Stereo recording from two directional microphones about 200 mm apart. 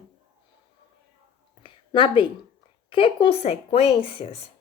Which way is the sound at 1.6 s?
25° left (ahead or behind).